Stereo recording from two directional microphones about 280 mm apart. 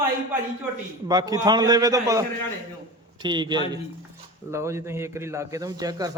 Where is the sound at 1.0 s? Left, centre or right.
Centre.